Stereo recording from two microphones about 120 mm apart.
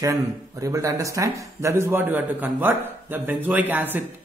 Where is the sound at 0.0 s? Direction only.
25° right (ahead or behind).